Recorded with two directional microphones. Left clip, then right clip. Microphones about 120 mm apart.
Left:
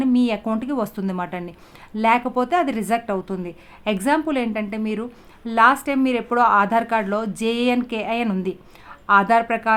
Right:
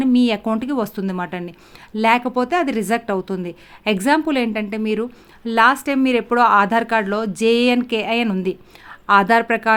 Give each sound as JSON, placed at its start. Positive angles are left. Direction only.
{"t": 0.0, "sound": "speech", "side_deg": -30}